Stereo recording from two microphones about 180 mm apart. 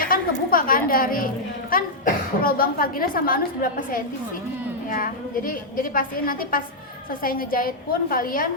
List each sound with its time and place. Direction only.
0.0 s a woman's voice: 50° left (ahead or behind)